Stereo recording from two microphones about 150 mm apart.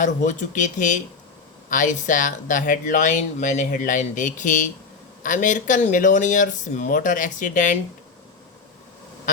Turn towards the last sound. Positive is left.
turn(degrees=60)  # may be behind; listen again after turning